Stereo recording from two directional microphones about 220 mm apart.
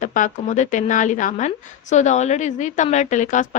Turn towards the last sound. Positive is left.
turn(degrees=35)  # may be behind; listen again after turning